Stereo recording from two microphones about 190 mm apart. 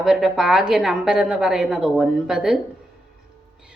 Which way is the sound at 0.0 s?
Centre (ahead or behind).